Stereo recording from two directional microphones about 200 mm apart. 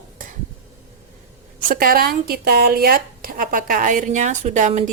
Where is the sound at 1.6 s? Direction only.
45° right (ahead or behind).